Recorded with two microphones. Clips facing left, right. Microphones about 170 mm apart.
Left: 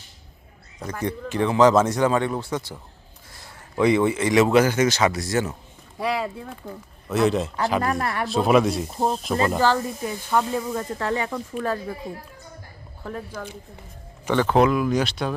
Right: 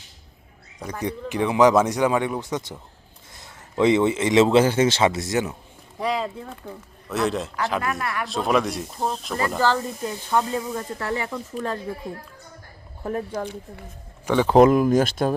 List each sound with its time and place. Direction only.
0.9 s a man's voice: 15° right (ahead or behind)
6.0 s speech: 10° left (ahead or behind)
7.8 s speech: 35° left (ahead or behind)
8.3 s speech: 5° left (ahead or behind)
9.5 s speech: 10° left (ahead or behind)
13.1 s speech: 40° right (ahead or behind)
14.3 s speech: 10° right (ahead or behind)
14.5 s speech: 45° right (ahead or behind)